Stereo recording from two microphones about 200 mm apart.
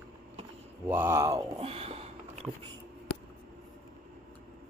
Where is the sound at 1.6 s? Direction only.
30° right (ahead or behind).